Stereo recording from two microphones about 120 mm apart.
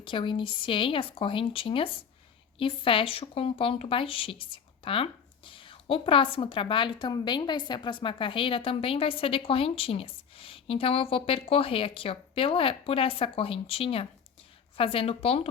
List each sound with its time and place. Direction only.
0.0 s speech: 45° left (ahead or behind)